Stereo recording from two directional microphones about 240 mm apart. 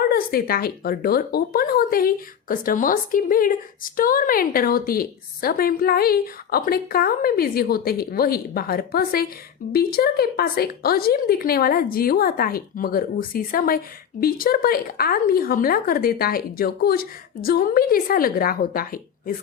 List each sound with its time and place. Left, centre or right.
0.1 s speech: left